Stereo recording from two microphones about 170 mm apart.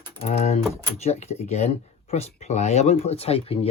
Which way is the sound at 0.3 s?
40° left (ahead or behind).